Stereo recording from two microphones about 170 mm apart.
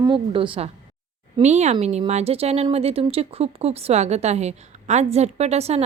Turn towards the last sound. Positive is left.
turn(degrees=-40)  # may be behind; listen again after turning